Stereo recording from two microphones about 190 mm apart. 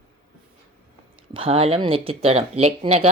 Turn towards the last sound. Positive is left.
turn(degrees=-30)  # may be behind; listen again after turning